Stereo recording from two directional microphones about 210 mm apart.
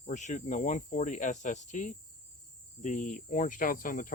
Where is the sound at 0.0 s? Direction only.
35° left (ahead or behind).